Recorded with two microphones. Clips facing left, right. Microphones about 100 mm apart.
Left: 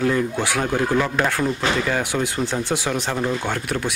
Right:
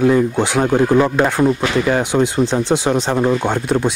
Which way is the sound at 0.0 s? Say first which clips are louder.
Right 7 dB; 20° right (ahead or behind).